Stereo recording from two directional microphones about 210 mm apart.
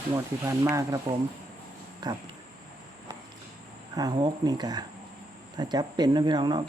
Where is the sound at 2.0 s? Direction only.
20° right (ahead or behind).